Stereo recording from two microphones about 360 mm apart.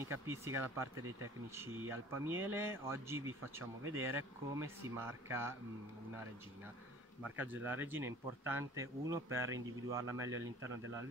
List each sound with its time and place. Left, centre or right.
0.0 s speech: centre
0.9 s speech: right
1.5 s speech: centre
7.3 s speech: centre